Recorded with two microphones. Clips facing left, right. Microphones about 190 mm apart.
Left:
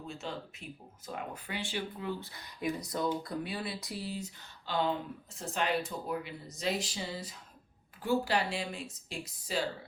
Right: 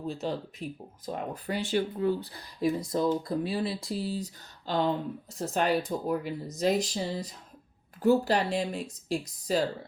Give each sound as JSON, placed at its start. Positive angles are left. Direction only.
{"t": 0.1, "sound": "speech", "side_deg": -35}
{"t": 2.8, "sound": "speech", "side_deg": -25}